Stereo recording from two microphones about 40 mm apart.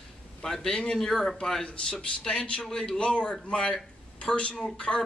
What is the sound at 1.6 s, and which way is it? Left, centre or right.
A man's voice, left.